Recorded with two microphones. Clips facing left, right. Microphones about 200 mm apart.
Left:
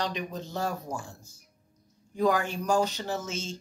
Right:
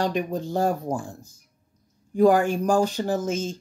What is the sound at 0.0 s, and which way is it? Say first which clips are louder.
Speech: right 8 dB; 50° right (ahead or behind).